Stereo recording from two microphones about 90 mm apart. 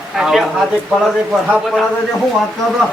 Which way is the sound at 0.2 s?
5° right (ahead or behind).